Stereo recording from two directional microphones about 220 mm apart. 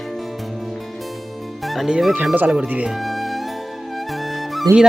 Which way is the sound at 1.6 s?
Centre (ahead or behind).